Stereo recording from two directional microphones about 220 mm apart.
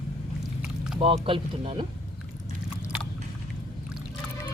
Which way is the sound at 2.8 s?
5° right (ahead or behind).